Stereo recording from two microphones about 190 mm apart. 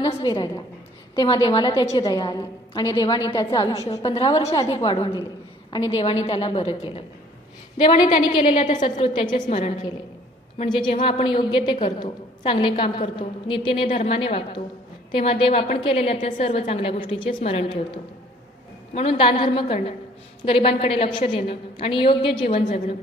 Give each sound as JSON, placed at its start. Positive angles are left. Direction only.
{"t": 0.0, "sound": "a woman's voice", "side_deg": 25}
{"t": 8.5, "sound": "a woman's voice", "side_deg": 40}
{"t": 8.8, "sound": "a woman's voice", "side_deg": 25}
{"t": 9.5, "sound": "a woman's voice", "side_deg": 40}
{"t": 10.6, "sound": "a woman's voice", "side_deg": 25}
{"t": 22.5, "sound": "a woman's voice", "side_deg": 40}